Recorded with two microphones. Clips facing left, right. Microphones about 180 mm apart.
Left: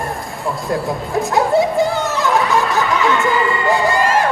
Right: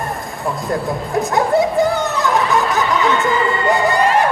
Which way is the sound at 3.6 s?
20° right (ahead or behind).